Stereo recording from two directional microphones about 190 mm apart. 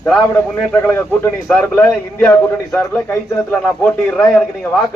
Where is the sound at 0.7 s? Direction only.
10° left (ahead or behind).